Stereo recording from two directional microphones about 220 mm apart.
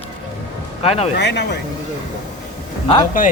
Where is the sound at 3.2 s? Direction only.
35° left (ahead or behind).